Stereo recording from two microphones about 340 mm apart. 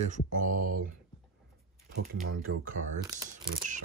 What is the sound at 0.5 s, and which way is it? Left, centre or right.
Speech, right.